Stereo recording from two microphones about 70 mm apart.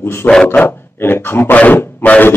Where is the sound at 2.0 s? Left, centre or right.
Left.